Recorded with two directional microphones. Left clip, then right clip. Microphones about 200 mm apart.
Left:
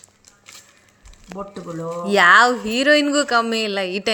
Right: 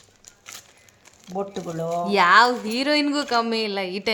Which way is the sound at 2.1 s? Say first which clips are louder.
Left 4 dB; 5° left (ahead or behind).